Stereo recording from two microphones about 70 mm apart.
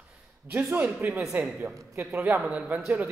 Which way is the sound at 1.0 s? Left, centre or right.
Right.